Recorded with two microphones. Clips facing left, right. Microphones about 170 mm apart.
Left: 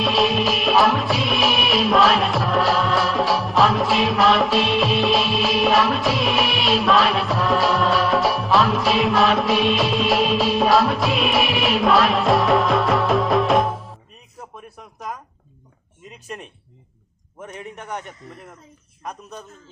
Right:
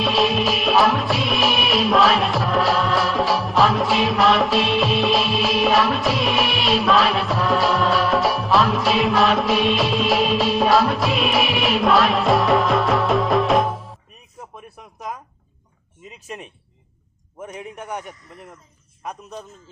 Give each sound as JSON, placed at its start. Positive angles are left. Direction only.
{"t": 0.0, "sound": "music", "side_deg": 0}
{"t": 14.5, "sound": "a sound", "side_deg": 0}
{"t": 16.0, "sound": "a man's voice", "side_deg": -5}